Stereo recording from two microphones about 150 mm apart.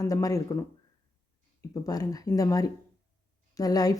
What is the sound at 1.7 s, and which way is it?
A woman's voice, 25° left (ahead or behind).